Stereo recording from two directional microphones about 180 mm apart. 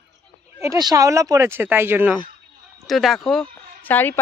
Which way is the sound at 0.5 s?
15° right (ahead or behind).